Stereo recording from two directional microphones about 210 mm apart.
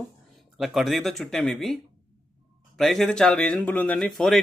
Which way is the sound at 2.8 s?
Centre (ahead or behind).